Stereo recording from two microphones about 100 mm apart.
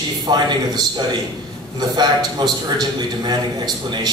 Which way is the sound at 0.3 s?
45° right (ahead or behind).